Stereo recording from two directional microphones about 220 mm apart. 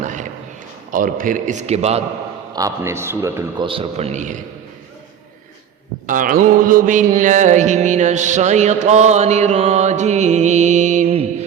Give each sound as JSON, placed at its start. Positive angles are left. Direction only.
{"t": 0.0, "sound": "a sound", "side_deg": -35}
{"t": 0.9, "sound": "music", "side_deg": -40}
{"t": 2.5, "sound": "a man's voice", "side_deg": -15}
{"t": 3.7, "sound": "a man's voice", "side_deg": -25}
{"t": 6.1, "sound": "music", "side_deg": -40}